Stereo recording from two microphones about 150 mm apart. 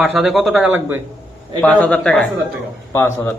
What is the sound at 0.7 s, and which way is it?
Speech, 15° right (ahead or behind).